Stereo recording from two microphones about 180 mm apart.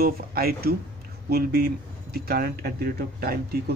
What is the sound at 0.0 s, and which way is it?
Speech, 55° right (ahead or behind).